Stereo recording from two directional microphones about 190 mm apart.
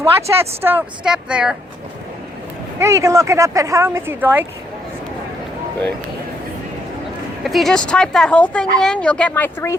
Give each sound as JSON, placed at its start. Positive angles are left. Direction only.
{"t": 0.0, "sound": "speech", "side_deg": -15}
{"t": 2.7, "sound": "speech", "side_deg": -15}
{"t": 7.4, "sound": "speech", "side_deg": 0}